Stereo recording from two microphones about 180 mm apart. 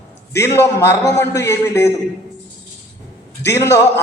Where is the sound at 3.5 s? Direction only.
15° left (ahead or behind).